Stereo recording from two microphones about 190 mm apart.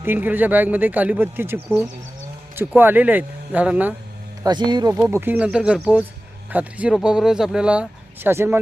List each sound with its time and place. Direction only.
0.0 s speech: 10° right (ahead or behind)
4.4 s speech: 25° right (ahead or behind)